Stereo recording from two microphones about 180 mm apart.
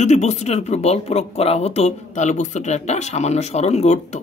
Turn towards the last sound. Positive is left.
turn(degrees=35)  # may be behind; listen again after turning